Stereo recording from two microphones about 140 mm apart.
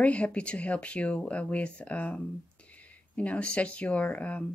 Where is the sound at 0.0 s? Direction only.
10° left (ahead or behind).